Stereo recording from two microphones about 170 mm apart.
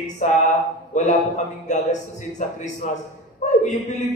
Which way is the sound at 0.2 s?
45° left (ahead or behind).